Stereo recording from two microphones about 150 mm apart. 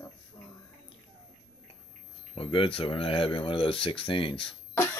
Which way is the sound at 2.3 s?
35° left (ahead or behind).